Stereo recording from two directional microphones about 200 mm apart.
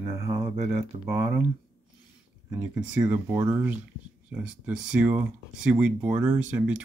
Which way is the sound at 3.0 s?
15° right (ahead or behind).